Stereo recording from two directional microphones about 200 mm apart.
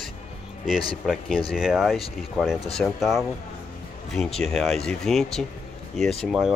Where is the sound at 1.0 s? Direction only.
5° right (ahead or behind).